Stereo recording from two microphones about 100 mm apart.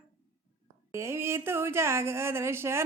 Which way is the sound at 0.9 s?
25° right (ahead or behind).